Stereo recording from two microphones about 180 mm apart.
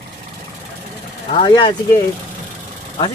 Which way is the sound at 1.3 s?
25° left (ahead or behind).